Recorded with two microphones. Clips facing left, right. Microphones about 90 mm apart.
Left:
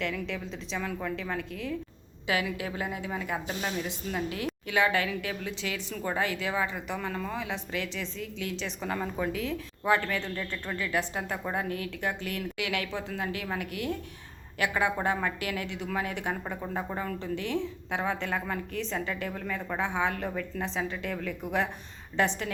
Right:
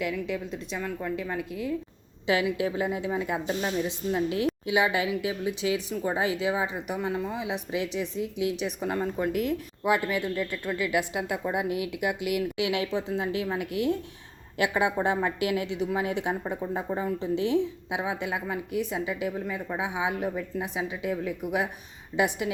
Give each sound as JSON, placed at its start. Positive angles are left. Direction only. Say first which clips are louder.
{"t": 0.0, "sound": "a woman's voice", "louder": "right 3 dB", "side_deg": -5}
{"t": 2.2, "sound": "speech", "louder": "right 5 dB", "side_deg": -25}